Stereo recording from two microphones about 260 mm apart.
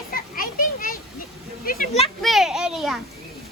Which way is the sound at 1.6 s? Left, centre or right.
Left.